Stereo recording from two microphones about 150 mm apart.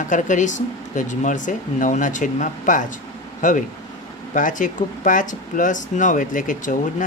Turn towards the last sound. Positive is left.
turn(degrees=60)  # may be behind; listen again after turning